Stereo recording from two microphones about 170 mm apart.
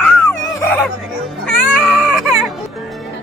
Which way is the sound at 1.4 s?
5° left (ahead or behind).